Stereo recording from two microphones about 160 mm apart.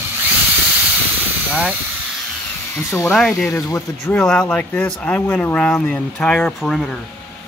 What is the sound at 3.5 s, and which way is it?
Speech, 20° left (ahead or behind).